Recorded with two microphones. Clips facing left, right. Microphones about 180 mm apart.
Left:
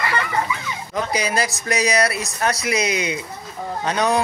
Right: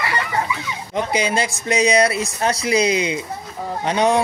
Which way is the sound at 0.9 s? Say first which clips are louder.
Right 2 dB; 25° right (ahead or behind).